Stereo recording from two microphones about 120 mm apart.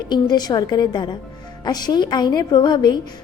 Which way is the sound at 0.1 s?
35° left (ahead or behind).